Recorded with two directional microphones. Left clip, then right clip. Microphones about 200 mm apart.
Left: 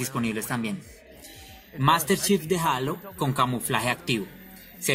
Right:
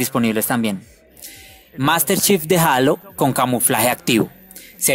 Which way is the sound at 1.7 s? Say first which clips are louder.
Right 4 dB; 50° right (ahead or behind).